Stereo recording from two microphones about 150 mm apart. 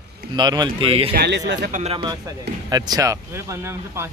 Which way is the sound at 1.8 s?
35° right (ahead or behind).